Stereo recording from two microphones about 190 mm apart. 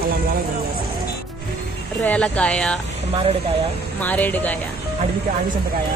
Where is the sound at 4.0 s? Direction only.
10° left (ahead or behind).